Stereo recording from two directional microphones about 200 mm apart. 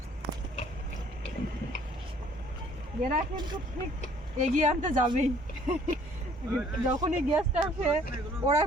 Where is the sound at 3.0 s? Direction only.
40° right (ahead or behind).